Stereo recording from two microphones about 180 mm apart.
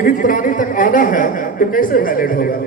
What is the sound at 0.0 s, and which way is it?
A man's voice, 50° left (ahead or behind).